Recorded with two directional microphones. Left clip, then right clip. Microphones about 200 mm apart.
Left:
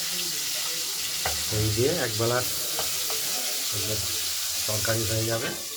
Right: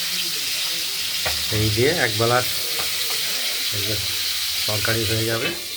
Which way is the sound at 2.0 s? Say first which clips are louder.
Right 7 dB; 25° right (ahead or behind).